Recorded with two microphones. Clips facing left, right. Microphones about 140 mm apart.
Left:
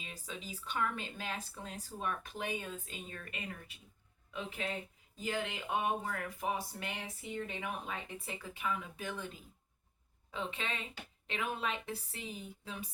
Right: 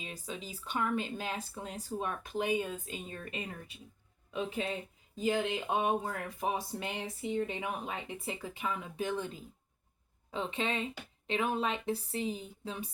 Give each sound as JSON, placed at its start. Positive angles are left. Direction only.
{"t": 0.0, "sound": "speech", "side_deg": -20}
{"t": 3.2, "sound": "speech", "side_deg": -25}
{"t": 5.2, "sound": "speech", "side_deg": -20}
{"t": 10.3, "sound": "speech", "side_deg": -25}